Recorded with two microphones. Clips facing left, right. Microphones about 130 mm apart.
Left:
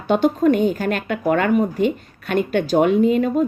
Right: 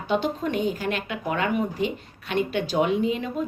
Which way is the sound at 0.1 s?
45° left (ahead or behind).